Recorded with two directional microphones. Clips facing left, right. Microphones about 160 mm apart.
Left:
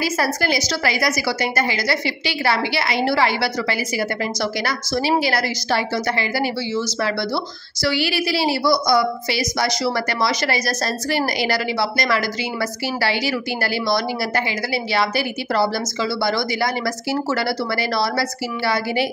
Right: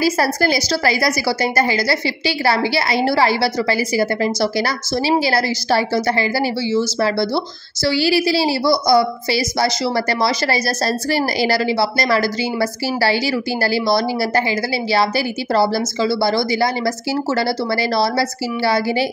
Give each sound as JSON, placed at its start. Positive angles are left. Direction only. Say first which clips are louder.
{"t": 0.0, "sound": "a woman's voice", "louder": "right 4 dB", "side_deg": -35}